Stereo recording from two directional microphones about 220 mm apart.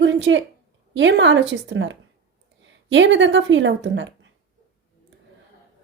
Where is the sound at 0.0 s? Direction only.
55° right (ahead or behind).